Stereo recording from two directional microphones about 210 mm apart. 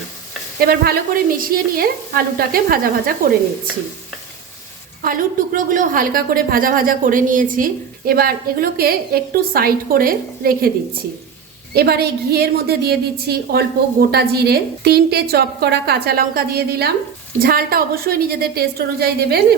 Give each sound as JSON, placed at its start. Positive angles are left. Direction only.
{"t": 0.6, "sound": "a woman's voice", "side_deg": -45}
{"t": 5.0, "sound": "a woman's voice", "side_deg": -40}
{"t": 11.7, "sound": "a woman's voice", "side_deg": -50}